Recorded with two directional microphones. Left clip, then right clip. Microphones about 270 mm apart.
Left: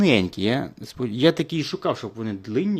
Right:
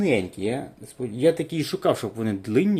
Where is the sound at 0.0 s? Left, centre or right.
Left.